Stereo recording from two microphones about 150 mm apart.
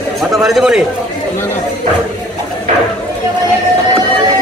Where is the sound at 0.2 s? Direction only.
Centre (ahead or behind).